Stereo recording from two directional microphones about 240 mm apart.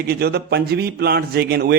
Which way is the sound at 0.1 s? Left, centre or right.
Right.